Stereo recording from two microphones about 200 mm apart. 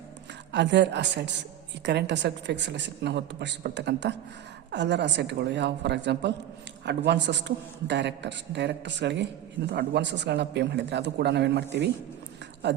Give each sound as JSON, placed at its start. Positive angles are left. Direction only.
{"t": 0.5, "sound": "a man's voice", "side_deg": -60}